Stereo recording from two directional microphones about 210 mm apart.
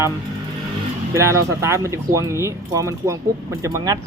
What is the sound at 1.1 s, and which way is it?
Speech, 15° right (ahead or behind).